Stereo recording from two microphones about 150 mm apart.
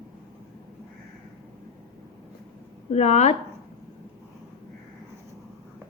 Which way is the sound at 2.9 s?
45° left (ahead or behind).